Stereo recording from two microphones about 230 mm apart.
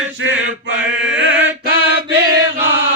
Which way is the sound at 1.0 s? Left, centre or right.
Right.